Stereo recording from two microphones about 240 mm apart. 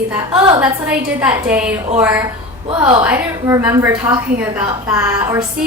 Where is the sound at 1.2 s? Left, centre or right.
Centre.